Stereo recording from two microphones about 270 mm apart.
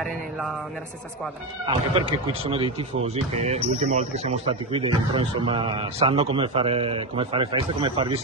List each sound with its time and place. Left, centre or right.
1.7 s speech: right